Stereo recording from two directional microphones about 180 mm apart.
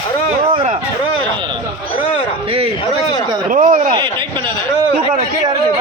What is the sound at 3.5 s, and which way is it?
Speech, 45° right (ahead or behind).